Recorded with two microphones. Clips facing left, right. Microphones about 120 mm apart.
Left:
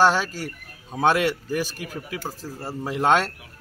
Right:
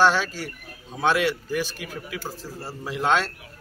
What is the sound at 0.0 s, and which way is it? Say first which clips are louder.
A man's voice: left 1 dB; 45° left (ahead or behind).